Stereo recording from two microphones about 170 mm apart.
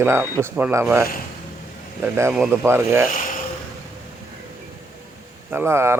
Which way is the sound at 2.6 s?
15° right (ahead or behind).